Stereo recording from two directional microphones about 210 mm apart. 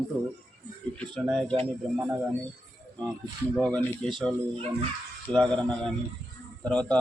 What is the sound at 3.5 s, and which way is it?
Speech, centre (ahead or behind).